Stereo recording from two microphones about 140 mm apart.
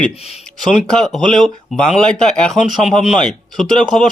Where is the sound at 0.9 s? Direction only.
5° left (ahead or behind).